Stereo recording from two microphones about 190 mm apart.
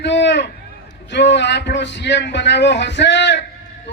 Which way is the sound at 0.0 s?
65° left (ahead or behind).